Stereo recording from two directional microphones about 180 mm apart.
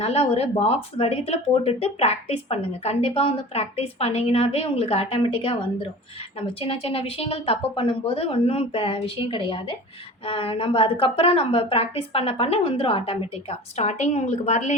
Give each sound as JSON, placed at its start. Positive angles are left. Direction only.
{"t": 0.0, "sound": "speech", "side_deg": 35}